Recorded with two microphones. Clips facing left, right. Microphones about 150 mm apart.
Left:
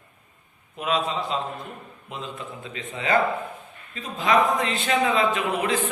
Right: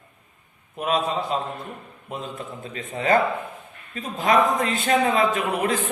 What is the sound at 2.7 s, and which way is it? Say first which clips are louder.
A man's voice: right 3 dB; 45° right (ahead or behind).